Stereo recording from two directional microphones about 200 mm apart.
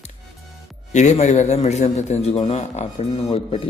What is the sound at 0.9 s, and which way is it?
A man's voice, 35° left (ahead or behind).